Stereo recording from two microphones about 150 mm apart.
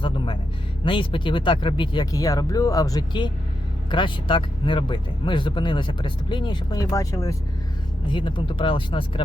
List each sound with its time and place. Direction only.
0.9 s speech: 35° left (ahead or behind)
8.1 s speech: 35° left (ahead or behind)